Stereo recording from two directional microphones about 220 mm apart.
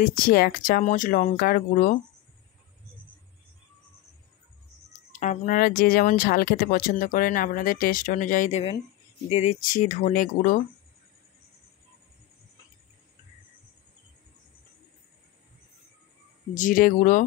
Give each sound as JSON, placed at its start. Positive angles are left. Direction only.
{"t": 0.0, "sound": "speech", "side_deg": 40}
{"t": 4.9, "sound": "speech", "side_deg": 35}
{"t": 16.5, "sound": "speech", "side_deg": 35}